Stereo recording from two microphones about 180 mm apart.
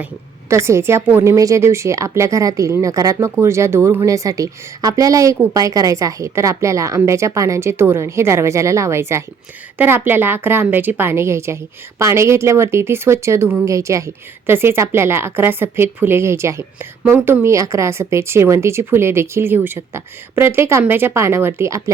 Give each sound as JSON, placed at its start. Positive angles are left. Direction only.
{"t": 0.5, "sound": "a woman's voice", "side_deg": -15}